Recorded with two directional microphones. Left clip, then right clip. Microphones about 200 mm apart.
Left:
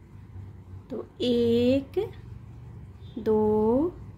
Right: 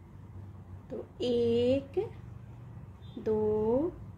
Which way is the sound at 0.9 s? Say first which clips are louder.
Left 4 dB; 20° left (ahead or behind).